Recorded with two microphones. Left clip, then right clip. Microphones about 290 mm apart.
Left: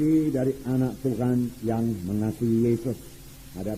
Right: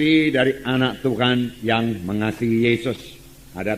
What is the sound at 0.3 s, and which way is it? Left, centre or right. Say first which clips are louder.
A man's voice: right 8 dB; right.